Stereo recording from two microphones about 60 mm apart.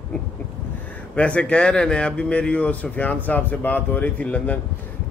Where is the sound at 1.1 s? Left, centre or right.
Centre.